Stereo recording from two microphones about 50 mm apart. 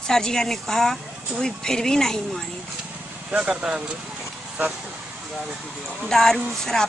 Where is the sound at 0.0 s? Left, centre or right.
Centre.